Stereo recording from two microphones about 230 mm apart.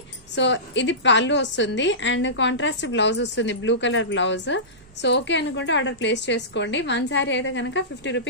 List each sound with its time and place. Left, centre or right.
0.4 s a woman's voice: left